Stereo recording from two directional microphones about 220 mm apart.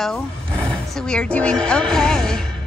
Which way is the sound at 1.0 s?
5° left (ahead or behind).